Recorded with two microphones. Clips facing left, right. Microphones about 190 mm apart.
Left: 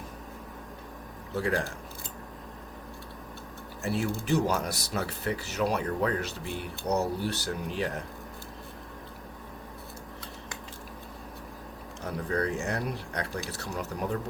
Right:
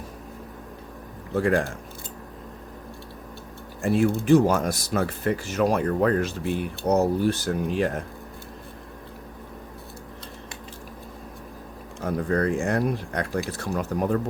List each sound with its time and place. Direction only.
1.4 s speech: 55° right (ahead or behind)
4.3 s speech: 50° right (ahead or behind)
12.0 s speech: 55° right (ahead or behind)